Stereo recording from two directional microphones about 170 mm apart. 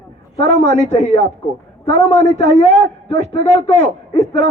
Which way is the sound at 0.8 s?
35° left (ahead or behind).